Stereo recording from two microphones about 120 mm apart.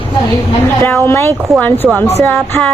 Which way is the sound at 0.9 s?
20° left (ahead or behind).